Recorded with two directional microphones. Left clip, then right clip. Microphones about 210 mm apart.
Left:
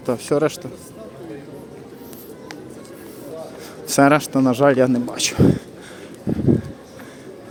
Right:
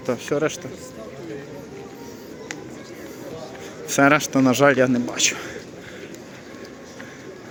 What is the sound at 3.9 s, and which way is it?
Speech, 20° left (ahead or behind).